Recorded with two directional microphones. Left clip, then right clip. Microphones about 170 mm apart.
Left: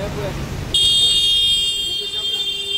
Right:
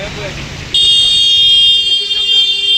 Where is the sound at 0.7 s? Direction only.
60° left (ahead or behind).